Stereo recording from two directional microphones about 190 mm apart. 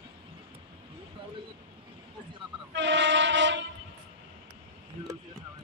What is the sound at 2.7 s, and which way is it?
Train, 70° right (ahead or behind).